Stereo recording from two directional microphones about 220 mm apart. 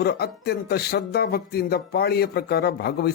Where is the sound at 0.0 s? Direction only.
45° left (ahead or behind).